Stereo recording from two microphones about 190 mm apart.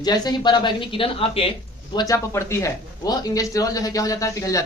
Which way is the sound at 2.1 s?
15° left (ahead or behind).